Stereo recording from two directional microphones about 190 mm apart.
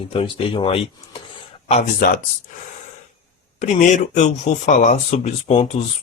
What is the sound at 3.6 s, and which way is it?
Speech, 40° left (ahead or behind).